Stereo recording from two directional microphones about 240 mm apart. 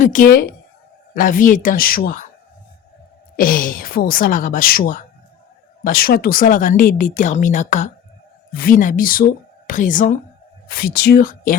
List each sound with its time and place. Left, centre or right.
0.0 s speech: left
3.3 s speech: left